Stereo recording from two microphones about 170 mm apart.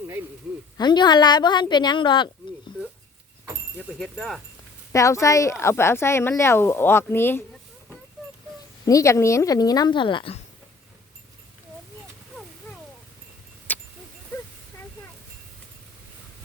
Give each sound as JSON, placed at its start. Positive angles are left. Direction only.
{"t": 0.8, "sound": "a woman's voice", "side_deg": 25}
{"t": 3.9, "sound": "speech", "side_deg": 0}
{"t": 4.9, "sound": "speech", "side_deg": 20}
{"t": 8.9, "sound": "a woman's voice", "side_deg": 20}
{"t": 13.7, "sound": "vehicle", "side_deg": 10}